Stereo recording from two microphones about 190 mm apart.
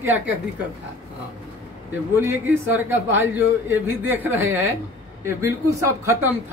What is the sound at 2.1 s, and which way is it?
A man's voice, 10° right (ahead or behind).